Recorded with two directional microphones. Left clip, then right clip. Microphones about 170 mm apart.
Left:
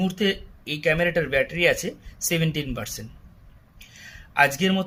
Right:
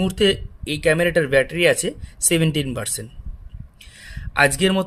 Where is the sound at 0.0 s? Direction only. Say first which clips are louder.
Right 6 dB; 50° right (ahead or behind).